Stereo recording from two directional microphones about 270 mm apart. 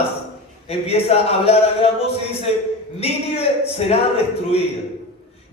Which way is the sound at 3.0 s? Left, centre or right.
Left.